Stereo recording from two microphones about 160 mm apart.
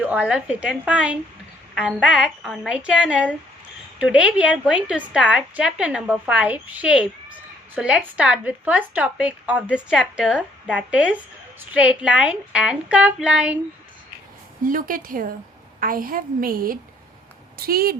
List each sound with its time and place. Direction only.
0.0 s a woman's voice: 10° right (ahead or behind)
14.6 s a woman's voice: 60° right (ahead or behind)